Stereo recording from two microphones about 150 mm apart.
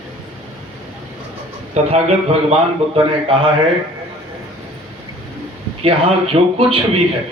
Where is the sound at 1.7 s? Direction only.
45° right (ahead or behind).